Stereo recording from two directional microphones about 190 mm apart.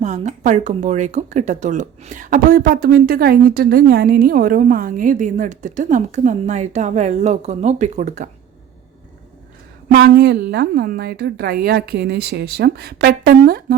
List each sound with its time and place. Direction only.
0.0 s speech: 35° right (ahead or behind)
9.9 s a woman's voice: 60° right (ahead or behind)